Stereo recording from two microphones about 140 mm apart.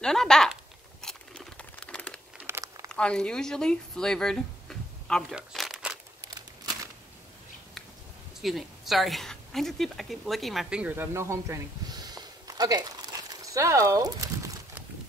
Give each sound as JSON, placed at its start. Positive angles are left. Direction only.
{"t": 0.0, "sound": "speech", "side_deg": 5}
{"t": 1.0, "sound": "crunch", "side_deg": 5}
{"t": 2.3, "sound": "crumpling", "side_deg": -15}
{"t": 2.9, "sound": "speech", "side_deg": 5}
{"t": 5.3, "sound": "crumpling", "side_deg": 0}
{"t": 6.2, "sound": "crumpling", "side_deg": -30}
{"t": 8.4, "sound": "a woman's voice", "side_deg": 0}